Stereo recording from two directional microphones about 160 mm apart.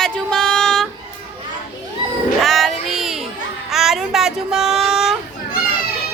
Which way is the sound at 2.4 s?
Centre (ahead or behind).